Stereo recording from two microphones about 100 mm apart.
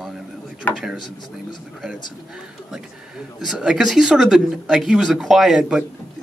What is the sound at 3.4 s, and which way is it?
Speech, 5° right (ahead or behind).